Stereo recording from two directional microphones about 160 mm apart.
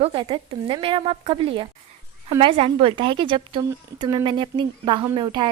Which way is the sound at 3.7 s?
20° right (ahead or behind).